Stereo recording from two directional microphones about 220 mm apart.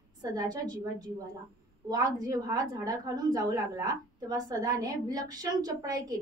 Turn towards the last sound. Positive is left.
turn(degrees=-15)  # may be behind; listen again after turning